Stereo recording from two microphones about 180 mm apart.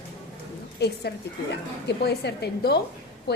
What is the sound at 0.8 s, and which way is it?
A woman's voice, 65° left (ahead or behind).